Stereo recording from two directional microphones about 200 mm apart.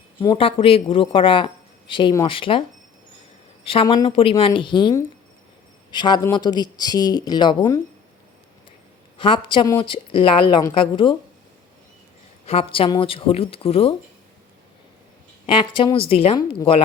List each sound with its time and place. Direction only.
0.2 s a woman's voice: 25° left (ahead or behind)
9.2 s a woman's voice: 25° left (ahead or behind)
12.5 s a woman's voice: 25° left (ahead or behind)
15.4 s a woman's voice: 25° left (ahead or behind)